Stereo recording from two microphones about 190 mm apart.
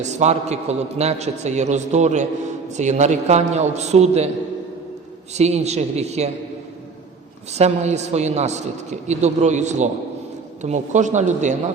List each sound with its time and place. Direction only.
0.0 s a man's voice: 35° right (ahead or behind)
5.3 s a man's voice: 35° right (ahead or behind)
7.5 s a man's voice: 35° right (ahead or behind)